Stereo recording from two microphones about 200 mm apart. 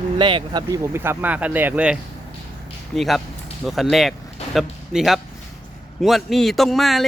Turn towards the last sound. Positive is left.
turn(degrees=0)  # may be behind; listen again after turning